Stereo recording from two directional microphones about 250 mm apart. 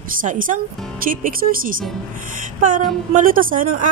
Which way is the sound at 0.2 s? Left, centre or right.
Right.